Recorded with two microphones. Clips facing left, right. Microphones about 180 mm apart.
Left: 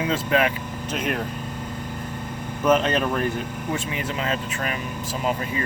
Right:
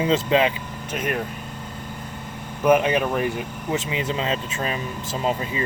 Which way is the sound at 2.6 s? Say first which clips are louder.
Right 2 dB; 10° right (ahead or behind).